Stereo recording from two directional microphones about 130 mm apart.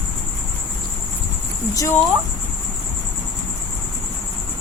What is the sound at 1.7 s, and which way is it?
Speech, 25° left (ahead or behind).